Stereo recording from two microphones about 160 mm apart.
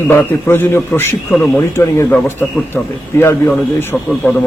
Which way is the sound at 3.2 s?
15° left (ahead or behind).